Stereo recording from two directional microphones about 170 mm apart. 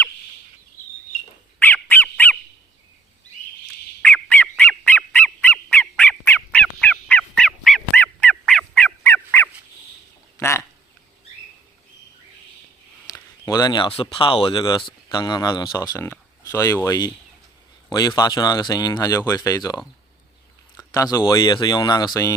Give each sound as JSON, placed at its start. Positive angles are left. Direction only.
{"t": 1.5, "sound": "bird", "side_deg": 10}
{"t": 4.1, "sound": "bird", "side_deg": 10}
{"t": 4.8, "sound": "honk", "side_deg": 5}
{"t": 8.2, "sound": "fowl", "side_deg": 5}
{"t": 10.3, "sound": "a sound", "side_deg": 15}
{"t": 13.1, "sound": "speech", "side_deg": 20}